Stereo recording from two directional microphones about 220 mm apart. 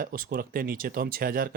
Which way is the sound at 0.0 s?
40° right (ahead or behind).